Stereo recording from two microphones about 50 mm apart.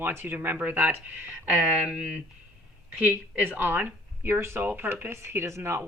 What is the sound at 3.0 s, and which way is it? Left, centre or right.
Speech, right.